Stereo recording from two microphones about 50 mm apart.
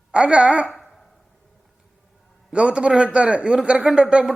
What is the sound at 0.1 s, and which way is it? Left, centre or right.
Speech, right.